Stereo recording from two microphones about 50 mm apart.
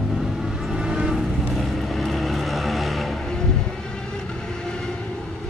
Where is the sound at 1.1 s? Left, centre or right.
Centre.